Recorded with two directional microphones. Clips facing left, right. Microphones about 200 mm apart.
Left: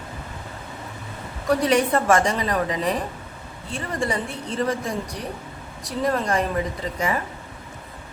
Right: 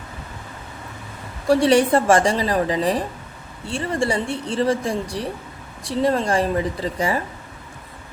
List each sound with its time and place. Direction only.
1.5 s a woman's voice: 30° right (ahead or behind)